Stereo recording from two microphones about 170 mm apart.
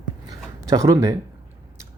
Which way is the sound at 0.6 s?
20° right (ahead or behind).